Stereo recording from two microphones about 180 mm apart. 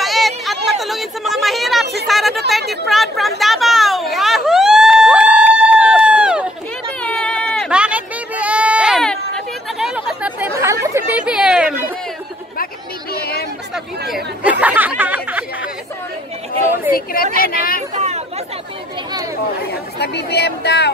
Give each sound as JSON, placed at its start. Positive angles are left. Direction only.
{"t": 0.0, "sound": "a sound", "side_deg": 0}
{"t": 2.0, "sound": "speech", "side_deg": 0}
{"t": 2.7, "sound": "chatter", "side_deg": 0}
{"t": 7.0, "sound": "sheep", "side_deg": 5}
{"t": 7.8, "sound": "a sound", "side_deg": -5}
{"t": 13.1, "sound": "a sound", "side_deg": 60}
{"t": 14.0, "sound": "chatter", "side_deg": -5}
{"t": 16.9, "sound": "speech", "side_deg": 55}
{"t": 17.9, "sound": "chatter", "side_deg": -40}
{"t": 20.0, "sound": "speech", "side_deg": 70}